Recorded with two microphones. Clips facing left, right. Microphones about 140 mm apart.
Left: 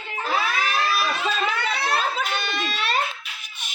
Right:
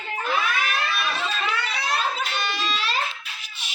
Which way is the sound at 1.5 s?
60° left (ahead or behind).